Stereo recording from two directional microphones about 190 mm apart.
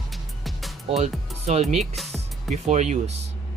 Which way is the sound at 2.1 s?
35° right (ahead or behind).